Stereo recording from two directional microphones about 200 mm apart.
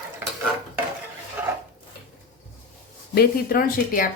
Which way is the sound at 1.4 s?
10° right (ahead or behind).